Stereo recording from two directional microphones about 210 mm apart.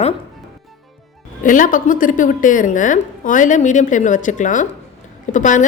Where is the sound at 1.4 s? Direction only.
40° left (ahead or behind).